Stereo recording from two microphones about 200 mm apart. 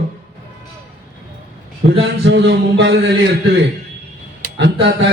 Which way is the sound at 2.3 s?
60° right (ahead or behind).